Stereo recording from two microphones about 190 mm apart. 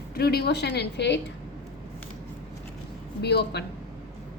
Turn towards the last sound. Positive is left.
turn(degrees=60)  # may be behind; listen again after turning